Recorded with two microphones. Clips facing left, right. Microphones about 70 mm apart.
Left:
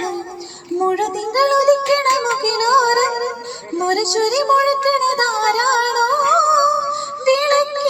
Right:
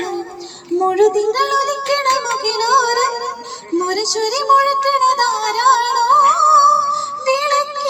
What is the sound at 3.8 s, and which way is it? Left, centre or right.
Child singing, left.